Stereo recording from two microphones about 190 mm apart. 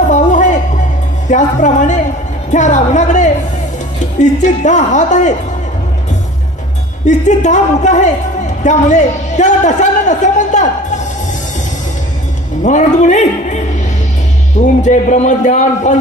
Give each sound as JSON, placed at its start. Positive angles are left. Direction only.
{"t": 0.1, "sound": "music", "side_deg": 40}
{"t": 1.3, "sound": "a woman's voice", "side_deg": 40}
{"t": 7.1, "sound": "a woman's voice", "side_deg": 40}
{"t": 12.6, "sound": "a woman's voice", "side_deg": 40}
{"t": 14.6, "sound": "a woman's voice", "side_deg": 40}